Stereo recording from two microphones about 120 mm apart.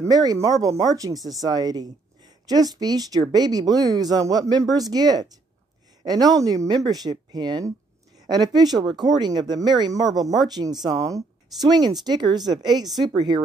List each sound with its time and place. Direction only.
0.0 s speech: 30° right (ahead or behind)